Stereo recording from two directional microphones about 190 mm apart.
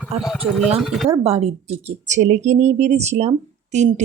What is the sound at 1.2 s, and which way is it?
Speech, 30° right (ahead or behind).